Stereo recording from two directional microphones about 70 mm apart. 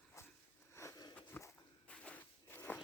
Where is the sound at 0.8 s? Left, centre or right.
Left.